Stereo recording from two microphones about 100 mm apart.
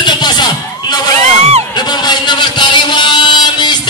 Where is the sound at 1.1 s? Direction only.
90° right.